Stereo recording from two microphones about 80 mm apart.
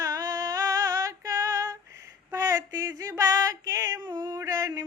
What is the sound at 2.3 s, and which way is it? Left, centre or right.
Female singing, right.